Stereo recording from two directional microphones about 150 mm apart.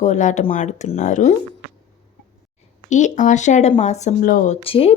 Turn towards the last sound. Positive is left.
turn(degrees=40)  # may be behind; listen again after turning